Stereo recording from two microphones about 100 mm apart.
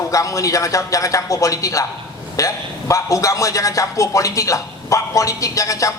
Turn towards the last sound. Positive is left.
turn(degrees=35)  # may be behind; listen again after turning